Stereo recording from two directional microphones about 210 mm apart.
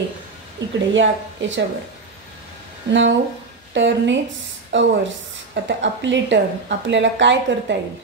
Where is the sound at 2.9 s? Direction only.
60° right (ahead or behind).